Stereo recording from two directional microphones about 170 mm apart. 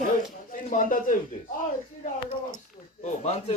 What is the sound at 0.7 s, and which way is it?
Speech, 50° left (ahead or behind).